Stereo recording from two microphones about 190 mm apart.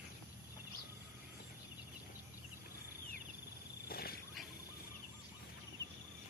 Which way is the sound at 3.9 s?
50° left (ahead or behind).